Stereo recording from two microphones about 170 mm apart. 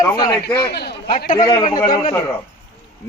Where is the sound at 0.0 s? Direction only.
20° left (ahead or behind).